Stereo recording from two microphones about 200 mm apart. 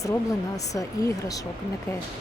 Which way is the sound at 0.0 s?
15° left (ahead or behind).